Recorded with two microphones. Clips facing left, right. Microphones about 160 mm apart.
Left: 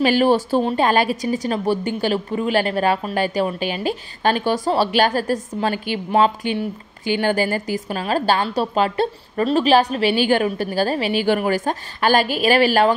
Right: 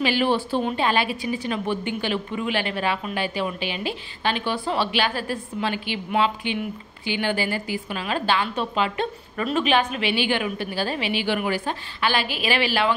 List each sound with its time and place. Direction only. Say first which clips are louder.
0.0 s a woman's voice: left 6 dB; 45° left (ahead or behind)